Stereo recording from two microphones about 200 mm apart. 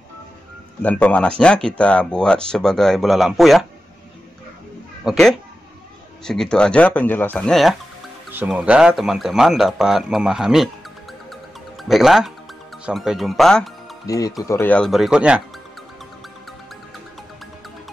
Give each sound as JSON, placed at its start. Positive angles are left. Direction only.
{"t": 0.8, "sound": "speech", "side_deg": 5}
{"t": 5.0, "sound": "speech", "side_deg": 0}
{"t": 8.3, "sound": "speech", "side_deg": -10}
{"t": 14.0, "sound": "speech", "side_deg": 15}